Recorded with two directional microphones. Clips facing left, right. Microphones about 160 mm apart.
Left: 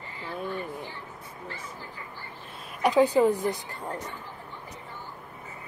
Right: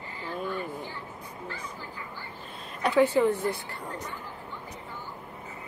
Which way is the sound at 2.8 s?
15° left (ahead or behind).